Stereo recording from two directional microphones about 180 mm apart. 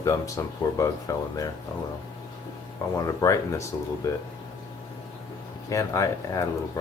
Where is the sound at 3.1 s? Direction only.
15° left (ahead or behind).